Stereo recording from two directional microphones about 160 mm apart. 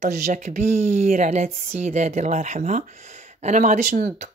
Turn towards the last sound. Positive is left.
turn(degrees=-50)  # may be behind; listen again after turning